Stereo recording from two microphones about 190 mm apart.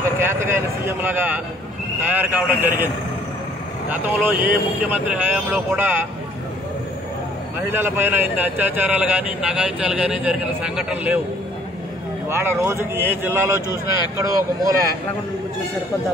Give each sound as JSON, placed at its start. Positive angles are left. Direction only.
{"t": 0.0, "sound": "speech", "side_deg": -15}
{"t": 3.9, "sound": "speech", "side_deg": -10}
{"t": 7.7, "sound": "speech", "side_deg": -10}
{"t": 12.3, "sound": "speech", "side_deg": -15}